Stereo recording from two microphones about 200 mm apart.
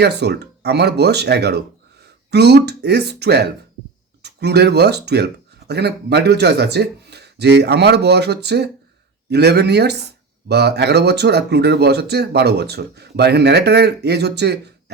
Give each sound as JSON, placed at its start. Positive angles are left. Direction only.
{"t": 0.0, "sound": "speech", "side_deg": -55}